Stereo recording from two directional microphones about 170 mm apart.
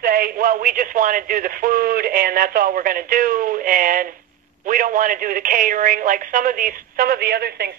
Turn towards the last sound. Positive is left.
turn(degrees=-70)  # may be behind; listen again after turning